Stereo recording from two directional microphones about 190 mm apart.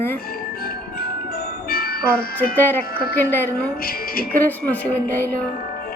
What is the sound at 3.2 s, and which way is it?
Speech, 10° left (ahead or behind).